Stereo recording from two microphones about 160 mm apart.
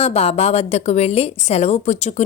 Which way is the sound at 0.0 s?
40° left (ahead or behind).